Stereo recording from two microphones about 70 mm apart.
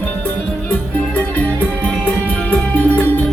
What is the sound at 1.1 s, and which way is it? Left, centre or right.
Music, left.